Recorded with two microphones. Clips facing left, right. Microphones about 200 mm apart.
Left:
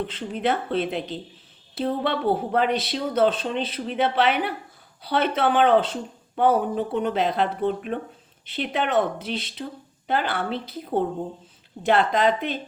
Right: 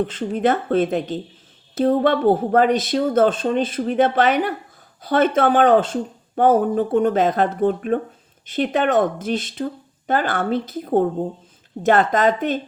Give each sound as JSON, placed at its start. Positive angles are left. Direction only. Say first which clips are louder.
{"t": 0.0, "sound": "speech", "louder": "right 6 dB", "side_deg": -45}